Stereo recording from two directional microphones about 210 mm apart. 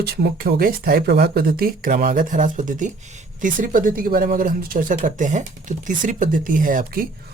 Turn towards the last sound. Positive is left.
turn(degrees=-40)  # may be behind; listen again after turning